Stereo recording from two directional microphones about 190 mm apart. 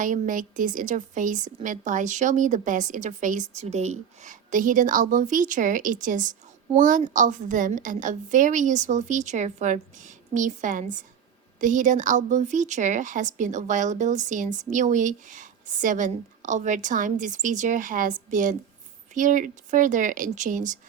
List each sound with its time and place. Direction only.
0.0 s a woman's voice: 45° right (ahead or behind)